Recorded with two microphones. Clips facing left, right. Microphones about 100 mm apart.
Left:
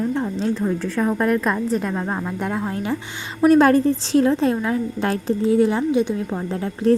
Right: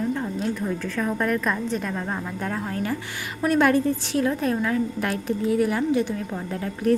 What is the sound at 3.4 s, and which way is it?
A woman's voice, 35° left (ahead or behind).